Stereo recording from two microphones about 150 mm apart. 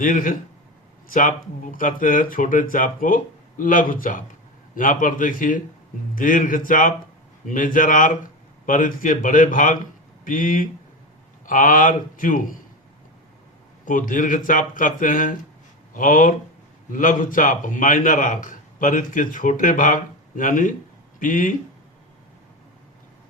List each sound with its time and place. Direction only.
0.0 s a man's voice: 65° left (ahead or behind)
13.8 s a man's voice: 65° left (ahead or behind)